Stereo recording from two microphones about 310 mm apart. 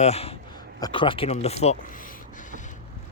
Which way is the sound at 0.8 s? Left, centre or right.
Centre.